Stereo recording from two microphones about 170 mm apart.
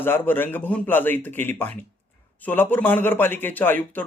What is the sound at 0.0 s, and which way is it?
Speech, 10° left (ahead or behind).